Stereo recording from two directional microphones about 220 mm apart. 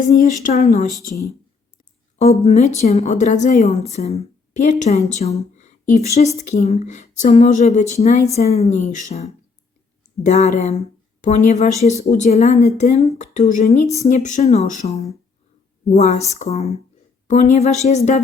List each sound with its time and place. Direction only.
0.1 s a woman's voice: 30° left (ahead or behind)
2.4 s a woman's voice: 30° left (ahead or behind)